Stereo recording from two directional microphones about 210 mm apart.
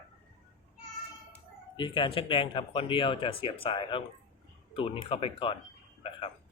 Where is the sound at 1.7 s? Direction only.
25° left (ahead or behind).